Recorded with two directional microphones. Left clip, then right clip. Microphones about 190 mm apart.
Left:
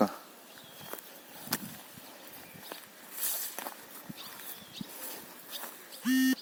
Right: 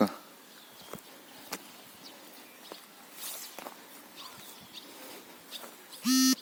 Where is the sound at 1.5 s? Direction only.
40° left (ahead or behind).